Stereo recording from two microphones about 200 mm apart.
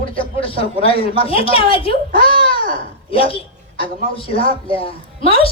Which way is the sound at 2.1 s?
25° left (ahead or behind).